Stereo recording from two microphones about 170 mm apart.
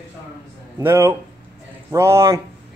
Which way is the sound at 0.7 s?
15° right (ahead or behind).